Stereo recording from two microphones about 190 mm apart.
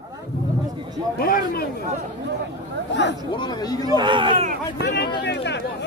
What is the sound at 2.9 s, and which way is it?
Speech, 70° left (ahead or behind).